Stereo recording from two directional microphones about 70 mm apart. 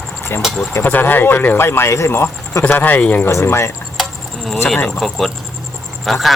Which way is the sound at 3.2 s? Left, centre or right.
Left.